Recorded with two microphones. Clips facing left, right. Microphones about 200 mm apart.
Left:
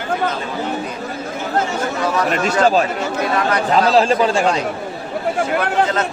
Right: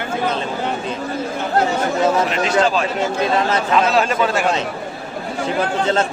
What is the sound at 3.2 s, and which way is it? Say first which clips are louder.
Speech: even; 25° right (ahead or behind).